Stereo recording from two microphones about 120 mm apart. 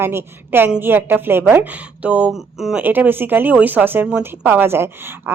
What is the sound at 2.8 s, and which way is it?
A woman's voice, 15° right (ahead or behind).